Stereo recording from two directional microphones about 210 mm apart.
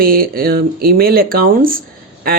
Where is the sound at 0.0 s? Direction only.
45° right (ahead or behind).